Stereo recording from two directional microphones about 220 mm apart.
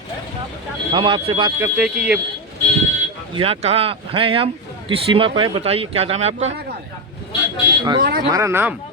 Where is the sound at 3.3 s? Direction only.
25° right (ahead or behind).